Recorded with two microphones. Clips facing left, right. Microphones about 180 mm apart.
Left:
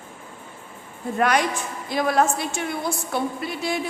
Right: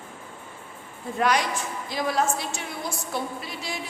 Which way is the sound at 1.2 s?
55° left (ahead or behind).